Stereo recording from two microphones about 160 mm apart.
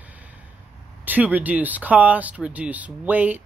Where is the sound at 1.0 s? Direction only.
10° right (ahead or behind).